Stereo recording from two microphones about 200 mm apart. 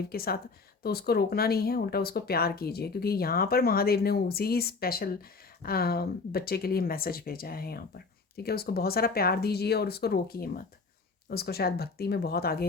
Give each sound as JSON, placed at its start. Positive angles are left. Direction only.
{"t": 0.1, "sound": "speech", "side_deg": 50}